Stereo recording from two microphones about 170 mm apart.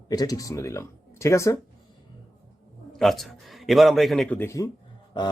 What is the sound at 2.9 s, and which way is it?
A man's voice, centre (ahead or behind).